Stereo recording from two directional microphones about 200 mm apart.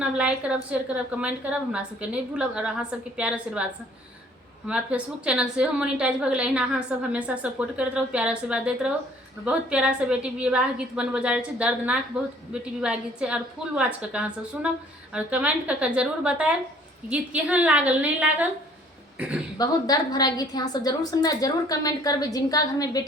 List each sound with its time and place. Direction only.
0.0 s a woman's voice: 5° right (ahead or behind)
19.5 s a woman's voice: 20° left (ahead or behind)